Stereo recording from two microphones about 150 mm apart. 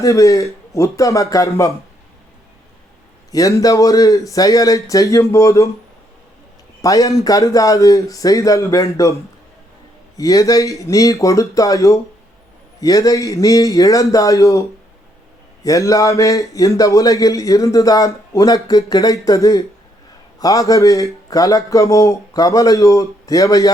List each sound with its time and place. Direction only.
0.0 s a man's voice: 20° left (ahead or behind)
3.3 s a man's voice: 20° left (ahead or behind)
6.8 s a man's voice: 20° left (ahead or behind)
10.2 s a man's voice: 20° left (ahead or behind)
15.6 s a man's voice: 20° left (ahead or behind)